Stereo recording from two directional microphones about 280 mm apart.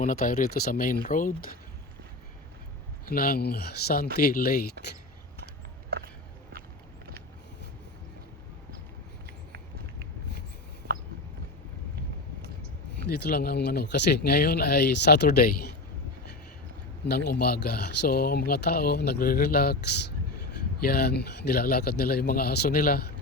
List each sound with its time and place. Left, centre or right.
0.0 s speech: left
3.1 s speech: left
13.1 s speech: left
17.4 s speech: left
20.8 s speech: left